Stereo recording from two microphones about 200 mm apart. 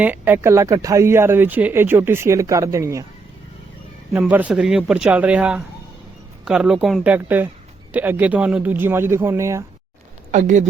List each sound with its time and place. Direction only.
0.0 s speech: 10° right (ahead or behind)
4.1 s speech: 10° right (ahead or behind)
10.3 s speech: 40° right (ahead or behind)